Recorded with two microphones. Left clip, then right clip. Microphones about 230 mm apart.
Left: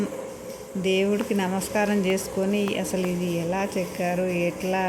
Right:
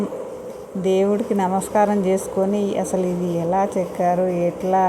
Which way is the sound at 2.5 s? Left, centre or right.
Right.